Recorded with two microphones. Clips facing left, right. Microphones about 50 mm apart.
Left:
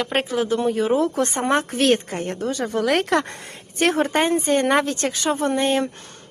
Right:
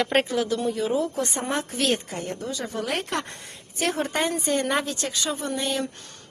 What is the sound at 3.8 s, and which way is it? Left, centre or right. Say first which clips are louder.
Speech: left 6 dB; left.